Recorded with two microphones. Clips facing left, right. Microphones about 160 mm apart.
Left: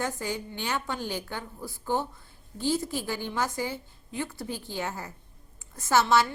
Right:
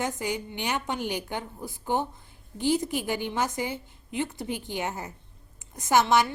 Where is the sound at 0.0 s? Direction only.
20° right (ahead or behind).